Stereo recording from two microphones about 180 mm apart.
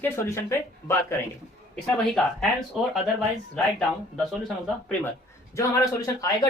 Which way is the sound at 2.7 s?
Centre (ahead or behind).